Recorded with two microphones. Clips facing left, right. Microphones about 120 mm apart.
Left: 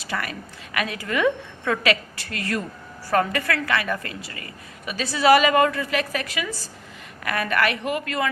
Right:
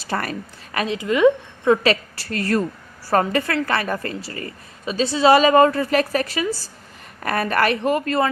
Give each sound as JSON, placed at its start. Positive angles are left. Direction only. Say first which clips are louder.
{"t": 0.0, "sound": "a woman's voice", "louder": "right 4 dB", "side_deg": -40}
{"t": 0.9, "sound": "a woman's voice", "louder": "right 8 dB", "side_deg": -20}